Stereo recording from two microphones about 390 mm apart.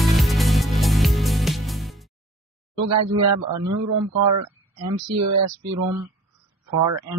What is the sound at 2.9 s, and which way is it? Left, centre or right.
Speech, right.